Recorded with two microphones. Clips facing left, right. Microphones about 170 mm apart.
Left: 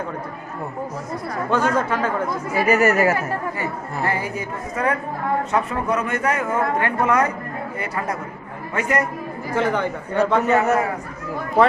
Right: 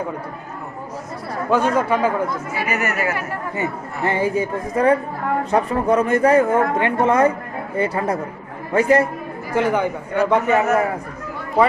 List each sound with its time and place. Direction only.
1.5 s speech: 10° right (ahead or behind)
2.6 s speech: 30° left (ahead or behind)
3.6 s a woman's voice: 25° right (ahead or behind)
9.6 s speech: 10° right (ahead or behind)